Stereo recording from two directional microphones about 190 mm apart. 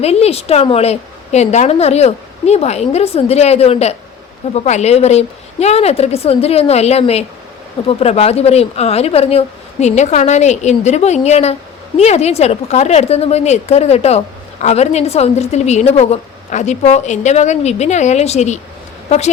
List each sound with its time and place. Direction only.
0.0 s a woman's voice: 35° left (ahead or behind)